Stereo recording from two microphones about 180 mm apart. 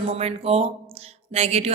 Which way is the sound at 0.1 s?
35° right (ahead or behind).